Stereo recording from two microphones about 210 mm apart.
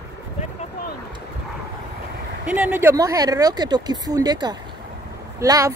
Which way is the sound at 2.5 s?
10° right (ahead or behind).